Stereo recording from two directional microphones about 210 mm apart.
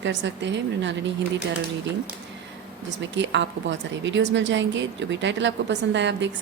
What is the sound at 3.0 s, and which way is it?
Speech, 60° right (ahead or behind).